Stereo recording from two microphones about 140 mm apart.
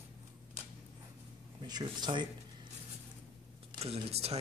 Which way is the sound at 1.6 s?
30° right (ahead or behind).